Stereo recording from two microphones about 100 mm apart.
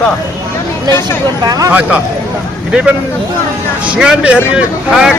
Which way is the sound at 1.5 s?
35° right (ahead or behind).